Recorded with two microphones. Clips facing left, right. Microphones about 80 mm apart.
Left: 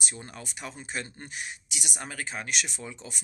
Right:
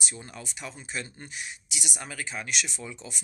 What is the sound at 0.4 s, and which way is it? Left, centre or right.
Speech, left.